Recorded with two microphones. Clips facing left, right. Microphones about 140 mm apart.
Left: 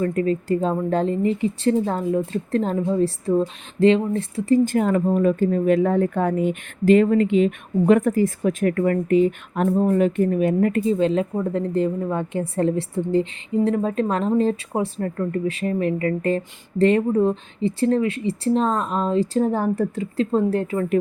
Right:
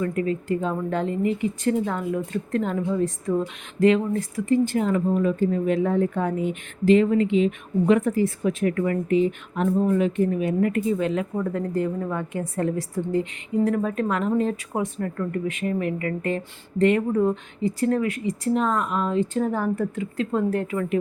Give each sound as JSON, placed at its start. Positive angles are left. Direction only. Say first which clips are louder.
{"t": 0.0, "sound": "speech", "louder": "left 3 dB", "side_deg": 35}
{"t": 9.7, "sound": "speech", "louder": "left 2 dB", "side_deg": 35}
{"t": 10.0, "sound": "speech", "louder": "left 3 dB", "side_deg": 50}
{"t": 10.7, "sound": "a woman's voice", "louder": "left 4 dB", "side_deg": 30}